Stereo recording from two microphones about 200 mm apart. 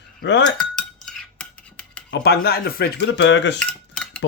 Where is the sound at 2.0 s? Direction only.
55° left (ahead or behind).